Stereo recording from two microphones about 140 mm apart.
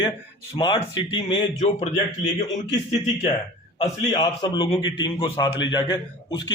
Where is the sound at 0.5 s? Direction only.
35° left (ahead or behind).